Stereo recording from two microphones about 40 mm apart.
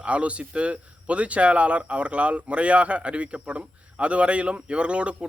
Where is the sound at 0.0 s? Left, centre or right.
Right.